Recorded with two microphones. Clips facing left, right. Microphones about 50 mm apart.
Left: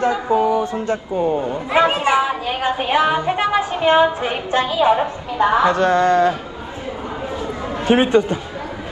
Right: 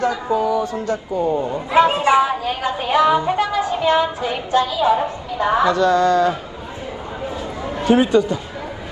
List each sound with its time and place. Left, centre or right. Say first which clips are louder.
0.0 s a man's voice: left 2 dB; left
7.4 s chatter: even; left